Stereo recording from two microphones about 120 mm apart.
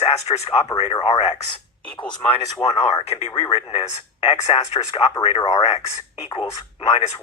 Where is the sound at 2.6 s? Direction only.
60° left (ahead or behind).